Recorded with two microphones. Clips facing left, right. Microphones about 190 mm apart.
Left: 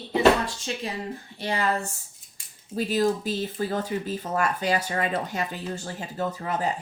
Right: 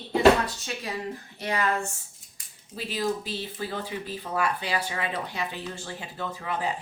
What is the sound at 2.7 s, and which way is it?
A man's voice, 45° left (ahead or behind).